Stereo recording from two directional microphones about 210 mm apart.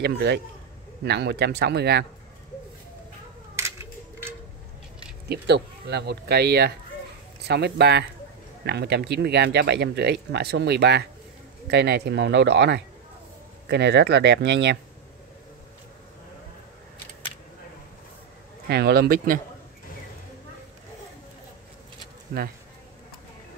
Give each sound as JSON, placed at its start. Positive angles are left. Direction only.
{"t": 0.0, "sound": "speech", "side_deg": -50}
{"t": 3.6, "sound": "a sound", "side_deg": -15}
{"t": 5.3, "sound": "speech", "side_deg": -55}
{"t": 18.7, "sound": "speech", "side_deg": -50}
{"t": 22.3, "sound": "speech", "side_deg": -45}